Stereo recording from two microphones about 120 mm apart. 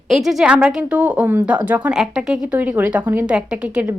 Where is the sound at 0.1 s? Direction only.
5° right (ahead or behind).